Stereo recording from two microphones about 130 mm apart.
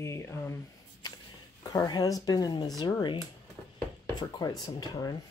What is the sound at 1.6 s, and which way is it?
Speech, 25° left (ahead or behind).